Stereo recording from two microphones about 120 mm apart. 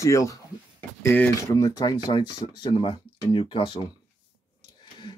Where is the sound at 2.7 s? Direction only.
45° left (ahead or behind).